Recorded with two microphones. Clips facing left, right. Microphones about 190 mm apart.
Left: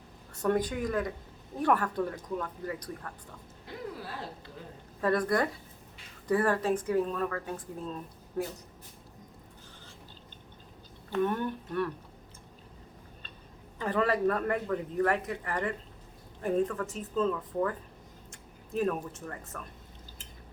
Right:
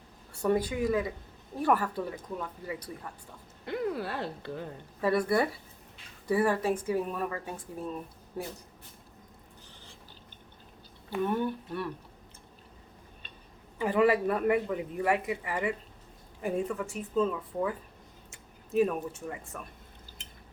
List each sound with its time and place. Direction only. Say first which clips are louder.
0.4 s a man's voice: right 1 dB; 5° right (ahead or behind)
3.7 s speech: right 8 dB; 65° right (ahead or behind)
4.9 s a man's voice: right 1 dB; 10° right (ahead or behind)
11.1 s a man's voice: even; 10° right (ahead or behind)
13.7 s a man's voice: right 4 dB; 10° right (ahead or behind)